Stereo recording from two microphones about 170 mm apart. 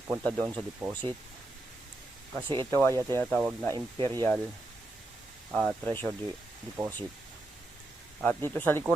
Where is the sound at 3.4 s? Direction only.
5° right (ahead or behind).